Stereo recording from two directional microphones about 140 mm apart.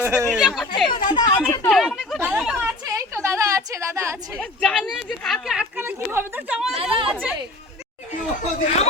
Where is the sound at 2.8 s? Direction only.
20° right (ahead or behind).